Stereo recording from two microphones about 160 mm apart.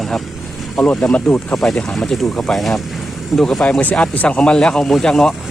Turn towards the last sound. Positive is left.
turn(degrees=0)  # may be behind; listen again after turning